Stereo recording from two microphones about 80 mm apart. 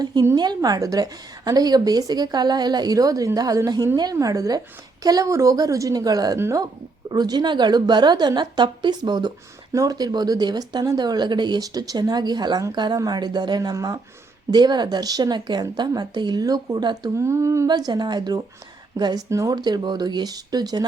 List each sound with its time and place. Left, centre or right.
0.0 s a woman's voice: right
9.7 s a woman's voice: right
14.5 s a woman's voice: right
17.2 s speech: right
17.7 s a woman's voice: right
19.3 s a woman's voice: right
19.6 s a woman's voice: right